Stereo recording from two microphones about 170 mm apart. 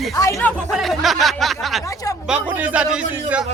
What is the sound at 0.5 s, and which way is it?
Speech, centre (ahead or behind).